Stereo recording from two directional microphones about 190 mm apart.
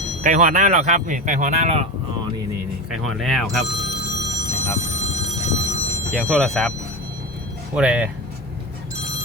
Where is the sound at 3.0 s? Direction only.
Centre (ahead or behind).